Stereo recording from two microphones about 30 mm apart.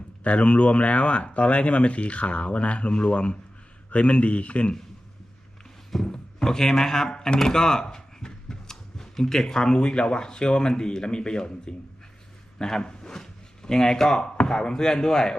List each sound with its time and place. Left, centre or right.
0.3 s speech: left
5.9 s a man's voice: centre